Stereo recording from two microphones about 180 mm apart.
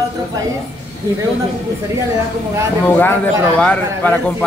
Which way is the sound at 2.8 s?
10° left (ahead or behind).